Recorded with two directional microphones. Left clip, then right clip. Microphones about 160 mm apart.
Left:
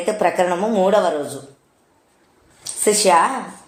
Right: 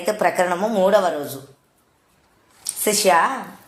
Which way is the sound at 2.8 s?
40° right (ahead or behind).